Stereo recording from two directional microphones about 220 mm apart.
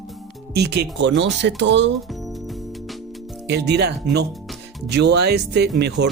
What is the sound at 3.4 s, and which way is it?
Speech, 50° right (ahead or behind).